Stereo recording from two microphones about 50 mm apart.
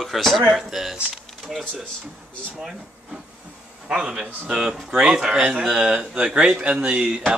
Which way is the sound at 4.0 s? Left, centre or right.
Centre.